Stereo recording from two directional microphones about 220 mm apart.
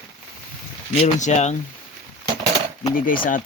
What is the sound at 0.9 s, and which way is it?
Speech, 30° left (ahead or behind).